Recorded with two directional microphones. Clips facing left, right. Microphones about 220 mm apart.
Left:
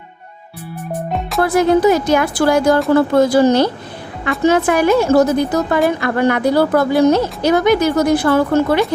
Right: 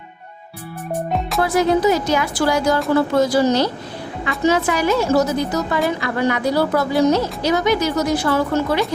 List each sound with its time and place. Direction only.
1.4 s a woman's voice: 55° left (ahead or behind)